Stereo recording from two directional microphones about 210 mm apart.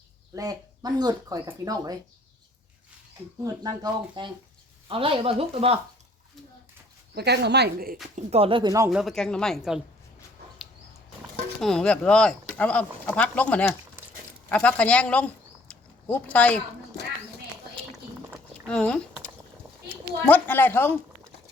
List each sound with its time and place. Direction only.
0.3 s speech: 20° right (ahead or behind)
3.4 s speech: 15° right (ahead or behind)
7.2 s speech: 50° right (ahead or behind)
8.1 s speech: 30° right (ahead or behind)
8.9 s speech: centre (ahead or behind)
11.6 s speech: 5° left (ahead or behind)
15.7 s a sound: 5° left (ahead or behind)
18.6 s a sound: 5° left (ahead or behind)
19.9 s a child's voice: 10° left (ahead or behind)